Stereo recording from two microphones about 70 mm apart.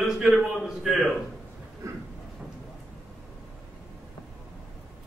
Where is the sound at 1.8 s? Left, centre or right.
Right.